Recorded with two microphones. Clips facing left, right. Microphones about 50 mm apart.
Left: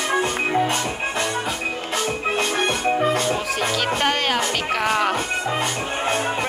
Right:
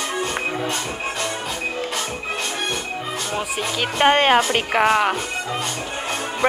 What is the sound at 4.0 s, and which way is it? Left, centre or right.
Speech, right.